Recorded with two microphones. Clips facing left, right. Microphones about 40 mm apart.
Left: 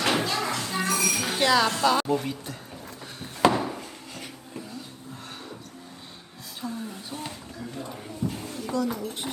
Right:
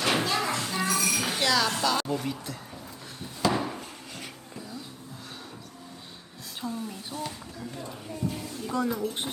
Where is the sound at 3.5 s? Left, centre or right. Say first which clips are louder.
Left 2 dB; centre.